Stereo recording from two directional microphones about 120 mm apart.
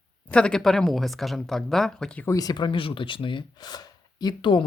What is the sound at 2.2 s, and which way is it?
Speech, 30° left (ahead or behind).